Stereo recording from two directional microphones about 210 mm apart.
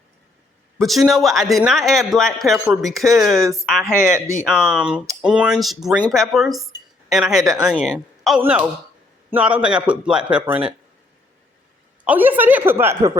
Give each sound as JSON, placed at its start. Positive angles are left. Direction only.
{"t": 0.8, "sound": "a man's voice", "side_deg": 0}
{"t": 3.3, "sound": "a woman's voice", "side_deg": -15}
{"t": 7.4, "sound": "a woman's voice", "side_deg": -15}
{"t": 7.7, "sound": "a man's voice", "side_deg": 0}
{"t": 12.0, "sound": "a woman's voice", "side_deg": -10}